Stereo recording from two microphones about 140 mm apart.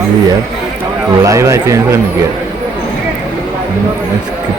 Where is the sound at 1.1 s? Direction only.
25° right (ahead or behind).